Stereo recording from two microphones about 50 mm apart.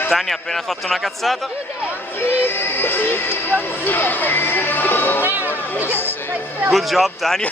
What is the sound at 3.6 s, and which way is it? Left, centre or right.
Speech, left.